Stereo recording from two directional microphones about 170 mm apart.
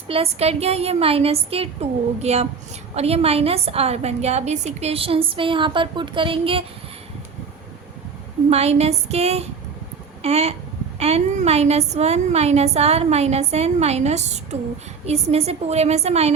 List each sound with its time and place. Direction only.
0.1 s a woman's voice: 35° right (ahead or behind)
8.4 s a woman's voice: 40° right (ahead or behind)